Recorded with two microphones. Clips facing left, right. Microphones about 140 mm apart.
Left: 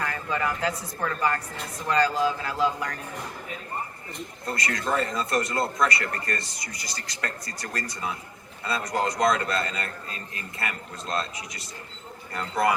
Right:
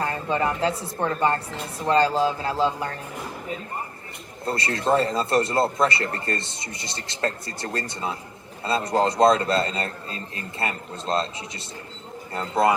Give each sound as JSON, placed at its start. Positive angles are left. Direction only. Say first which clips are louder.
{"t": 0.0, "sound": "speech", "louder": "right 4 dB", "side_deg": -30}
{"t": 4.4, "sound": "speech", "louder": "right 6 dB", "side_deg": -30}